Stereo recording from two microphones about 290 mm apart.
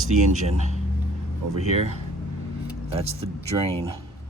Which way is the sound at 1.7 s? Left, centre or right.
Right.